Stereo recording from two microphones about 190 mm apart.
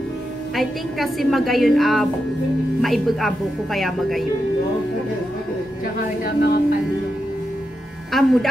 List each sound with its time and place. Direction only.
0.6 s a woman's voice: centre (ahead or behind)
6.2 s speech: 55° left (ahead or behind)
8.1 s a woman's voice: centre (ahead or behind)